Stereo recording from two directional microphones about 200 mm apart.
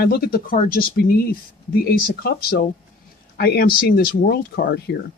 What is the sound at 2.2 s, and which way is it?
Speech, 50° left (ahead or behind).